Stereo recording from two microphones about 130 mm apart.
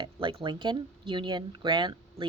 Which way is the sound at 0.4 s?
40° right (ahead or behind).